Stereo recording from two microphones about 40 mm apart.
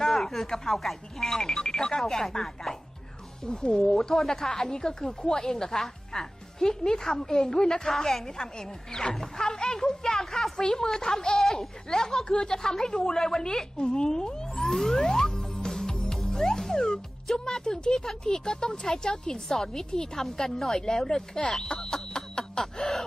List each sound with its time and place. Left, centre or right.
0.0 s a woman's voice: centre
13.9 s music: centre
16.9 s a woman's voice: centre